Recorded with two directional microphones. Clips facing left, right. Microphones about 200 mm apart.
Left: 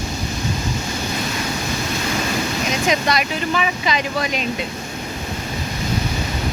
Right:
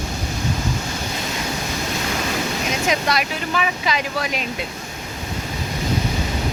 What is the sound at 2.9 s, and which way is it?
Speech, 5° right (ahead or behind).